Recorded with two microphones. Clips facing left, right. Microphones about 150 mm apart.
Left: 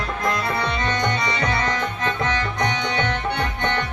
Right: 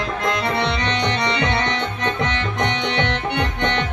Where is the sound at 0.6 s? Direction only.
85° right.